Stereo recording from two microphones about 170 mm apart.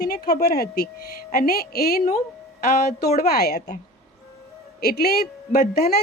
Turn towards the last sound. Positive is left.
turn(degrees=60)  # may be behind; listen again after turning